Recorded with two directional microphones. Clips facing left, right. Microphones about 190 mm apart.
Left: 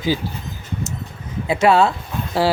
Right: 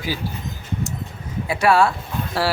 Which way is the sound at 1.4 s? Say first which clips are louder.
Left 2 dB; 20° left (ahead or behind).